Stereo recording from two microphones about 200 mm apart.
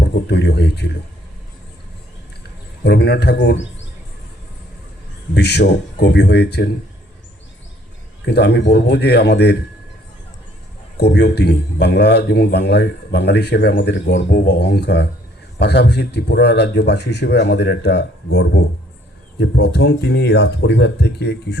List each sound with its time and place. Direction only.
0.0 s speech: 55° left (ahead or behind)
2.8 s a man's voice: 55° left (ahead or behind)
5.3 s a man's voice: 55° left (ahead or behind)
8.2 s a man's voice: 55° left (ahead or behind)
10.9 s a man's voice: 55° left (ahead or behind)